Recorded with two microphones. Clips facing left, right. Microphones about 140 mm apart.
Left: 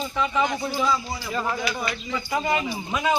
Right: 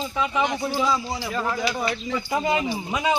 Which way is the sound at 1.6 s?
30° right (ahead or behind).